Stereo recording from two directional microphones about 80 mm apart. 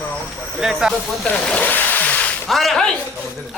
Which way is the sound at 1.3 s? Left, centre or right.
Centre.